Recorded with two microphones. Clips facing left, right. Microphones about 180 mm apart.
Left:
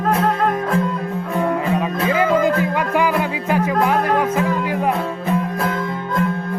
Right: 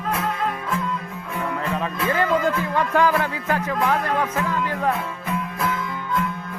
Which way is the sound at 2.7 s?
10° left (ahead or behind).